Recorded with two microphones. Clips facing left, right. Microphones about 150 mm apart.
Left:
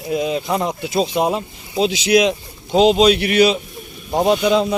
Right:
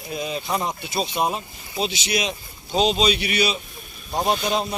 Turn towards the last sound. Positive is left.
turn(degrees=90)